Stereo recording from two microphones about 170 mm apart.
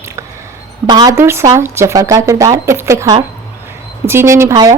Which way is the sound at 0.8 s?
25° right (ahead or behind).